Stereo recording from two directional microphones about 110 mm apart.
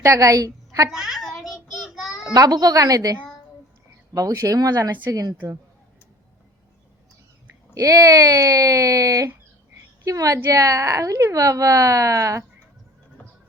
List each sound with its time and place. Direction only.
0.0 s a woman's voice: 30° right (ahead or behind)
0.9 s a child's voice: centre (ahead or behind)
2.3 s speech: 35° right (ahead or behind)
7.7 s speech: 30° right (ahead or behind)